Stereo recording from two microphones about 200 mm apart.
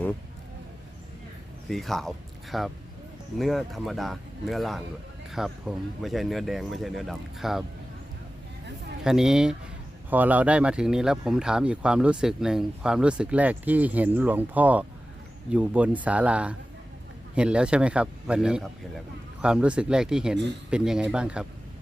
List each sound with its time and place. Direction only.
1.7 s speech: centre (ahead or behind)
9.0 s speech: 5° right (ahead or behind)